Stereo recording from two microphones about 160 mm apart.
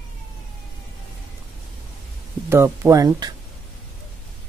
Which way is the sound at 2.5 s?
15° right (ahead or behind).